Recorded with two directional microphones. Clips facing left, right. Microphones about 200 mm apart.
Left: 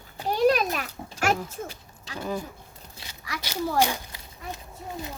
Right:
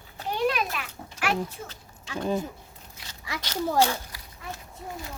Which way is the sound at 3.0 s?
30° left (ahead or behind).